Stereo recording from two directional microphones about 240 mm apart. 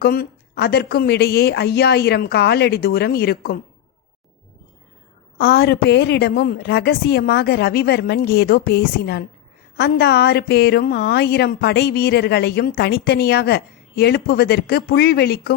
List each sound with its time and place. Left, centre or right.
0.0 s a woman's voice: left
5.4 s a woman's voice: left